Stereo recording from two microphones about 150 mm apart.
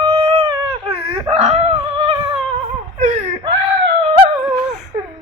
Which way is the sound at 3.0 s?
50° right (ahead or behind).